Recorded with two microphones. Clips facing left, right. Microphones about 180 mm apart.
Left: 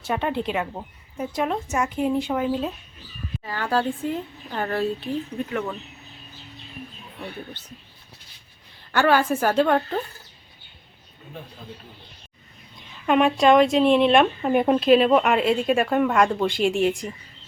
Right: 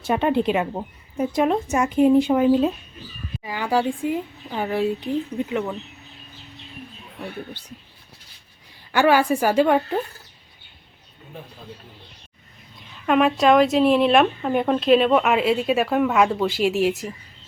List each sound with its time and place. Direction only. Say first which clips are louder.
0.0 s speech: right 5 dB; 20° right (ahead or behind)
8.9 s speech: right 2 dB; 10° right (ahead or behind)
13.1 s speech: even; centre (ahead or behind)